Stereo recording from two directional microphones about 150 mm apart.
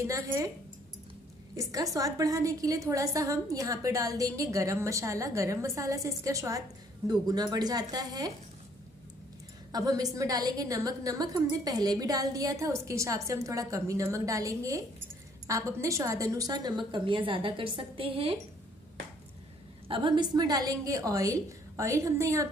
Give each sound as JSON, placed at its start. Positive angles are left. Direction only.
{"t": 0.0, "sound": "a woman's voice", "side_deg": -20}
{"t": 1.6, "sound": "a woman's voice", "side_deg": -25}
{"t": 9.7, "sound": "a woman's voice", "side_deg": -25}
{"t": 19.9, "sound": "a woman's voice", "side_deg": -30}